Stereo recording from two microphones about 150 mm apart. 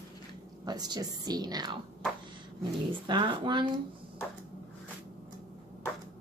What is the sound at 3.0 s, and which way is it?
Speech, 30° right (ahead or behind).